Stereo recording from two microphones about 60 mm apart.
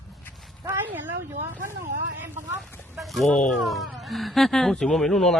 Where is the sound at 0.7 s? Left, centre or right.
Right.